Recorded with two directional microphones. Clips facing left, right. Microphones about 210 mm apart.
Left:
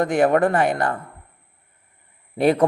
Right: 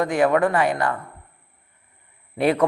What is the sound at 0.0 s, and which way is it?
Speech, 50° left (ahead or behind).